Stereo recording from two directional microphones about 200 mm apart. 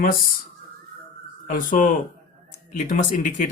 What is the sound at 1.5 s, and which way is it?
Speech, 40° left (ahead or behind).